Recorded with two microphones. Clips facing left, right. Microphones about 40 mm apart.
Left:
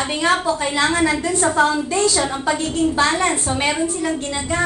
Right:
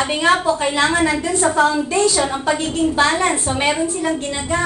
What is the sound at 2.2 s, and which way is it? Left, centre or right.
Speech, centre.